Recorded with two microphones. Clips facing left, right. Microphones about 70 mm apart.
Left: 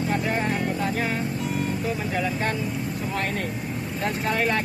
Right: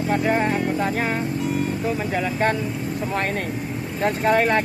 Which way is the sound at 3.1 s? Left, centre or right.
Right.